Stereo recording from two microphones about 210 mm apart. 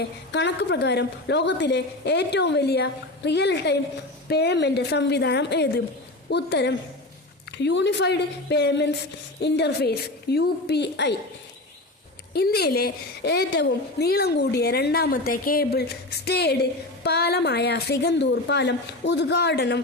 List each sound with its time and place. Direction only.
0.3 s a woman's voice: 55° left (ahead or behind)
12.3 s a woman's voice: 50° left (ahead or behind)